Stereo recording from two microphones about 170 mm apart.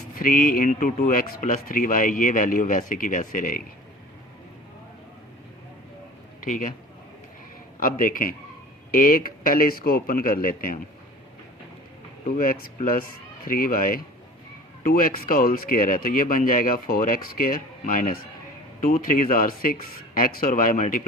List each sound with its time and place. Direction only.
0.2 s speech: 55° left (ahead or behind)
6.4 s a man's voice: 50° left (ahead or behind)
7.8 s speech: 55° left (ahead or behind)
12.2 s speech: 55° left (ahead or behind)